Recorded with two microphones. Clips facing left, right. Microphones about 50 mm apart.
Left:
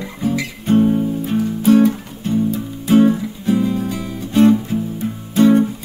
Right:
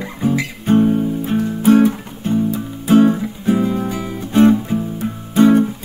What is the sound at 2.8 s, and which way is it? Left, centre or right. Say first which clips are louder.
Music: right 1 dB; centre.